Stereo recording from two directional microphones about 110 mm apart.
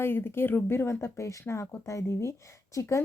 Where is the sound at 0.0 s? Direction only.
20° left (ahead or behind).